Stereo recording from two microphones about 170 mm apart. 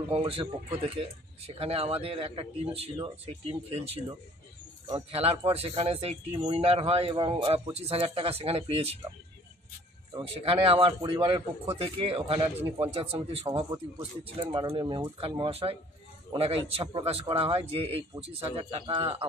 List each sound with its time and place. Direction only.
0.3 s speech: 35° right (ahead or behind)
10.1 s speech: 30° right (ahead or behind)